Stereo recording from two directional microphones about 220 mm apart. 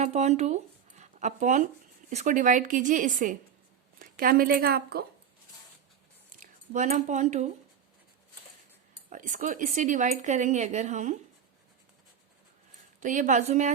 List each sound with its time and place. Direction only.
0.0 s a woman's voice: 30° right (ahead or behind)
6.4 s speech: 35° right (ahead or behind)
9.0 s speech: 35° right (ahead or behind)
13.0 s speech: 35° right (ahead or behind)